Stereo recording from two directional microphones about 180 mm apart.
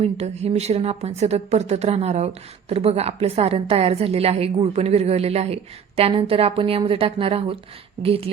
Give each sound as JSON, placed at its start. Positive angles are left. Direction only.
{"t": 0.0, "sound": "a woman's voice", "side_deg": -35}